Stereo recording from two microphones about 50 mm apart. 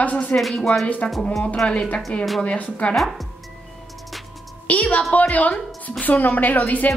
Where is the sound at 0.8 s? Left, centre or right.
Left.